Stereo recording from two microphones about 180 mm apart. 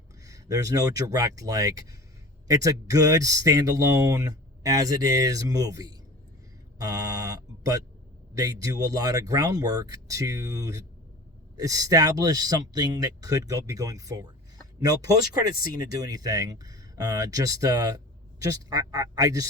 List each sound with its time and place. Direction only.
0.3 s speech: 20° right (ahead or behind)
6.7 s a sound: 20° right (ahead or behind)
8.4 s speech: 20° right (ahead or behind)